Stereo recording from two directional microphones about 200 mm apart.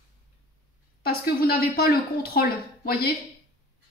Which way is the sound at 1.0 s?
50° left (ahead or behind).